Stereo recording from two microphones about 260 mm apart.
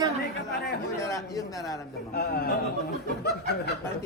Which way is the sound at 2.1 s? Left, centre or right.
Left.